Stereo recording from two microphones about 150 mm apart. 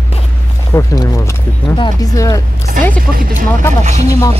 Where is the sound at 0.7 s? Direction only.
20° left (ahead or behind).